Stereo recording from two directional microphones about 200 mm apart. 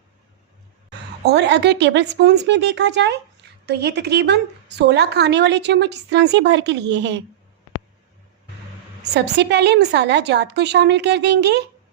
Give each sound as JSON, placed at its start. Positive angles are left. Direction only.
{"t": 1.2, "sound": "a woman's voice", "side_deg": -55}
{"t": 9.1, "sound": "a woman's voice", "side_deg": -60}